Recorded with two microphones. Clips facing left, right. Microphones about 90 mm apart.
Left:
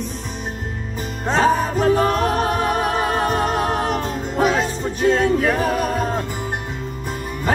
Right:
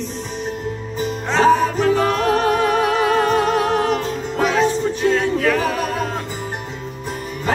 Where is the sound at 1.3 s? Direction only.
40° left (ahead or behind).